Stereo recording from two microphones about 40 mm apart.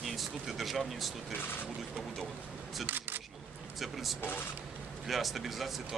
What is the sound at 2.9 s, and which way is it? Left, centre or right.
Single-lens reflex camera, right.